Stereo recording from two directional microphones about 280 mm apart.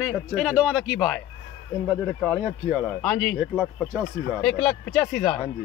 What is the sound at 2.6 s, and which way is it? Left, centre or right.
A man's voice, centre.